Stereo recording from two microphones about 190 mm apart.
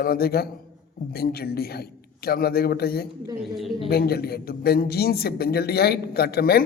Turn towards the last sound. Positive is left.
turn(degrees=55)  # may be behind; listen again after turning